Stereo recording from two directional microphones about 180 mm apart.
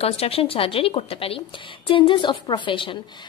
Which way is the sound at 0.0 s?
35° left (ahead or behind).